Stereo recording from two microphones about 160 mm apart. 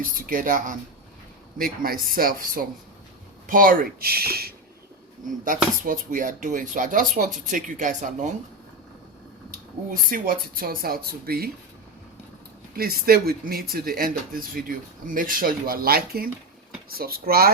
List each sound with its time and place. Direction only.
0.0 s speech: 60° right (ahead or behind)
5.5 s speech: 55° right (ahead or behind)
9.9 s speech: 65° right (ahead or behind)
12.7 s speech: 70° right (ahead or behind)